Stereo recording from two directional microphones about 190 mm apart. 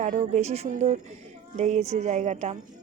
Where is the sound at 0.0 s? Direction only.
40° right (ahead or behind).